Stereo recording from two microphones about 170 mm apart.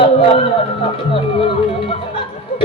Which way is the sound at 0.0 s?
30° left (ahead or behind).